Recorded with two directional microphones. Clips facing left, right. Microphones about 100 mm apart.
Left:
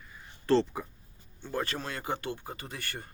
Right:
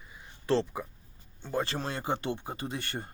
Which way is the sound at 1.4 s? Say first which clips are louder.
Right 2 dB; 25° right (ahead or behind).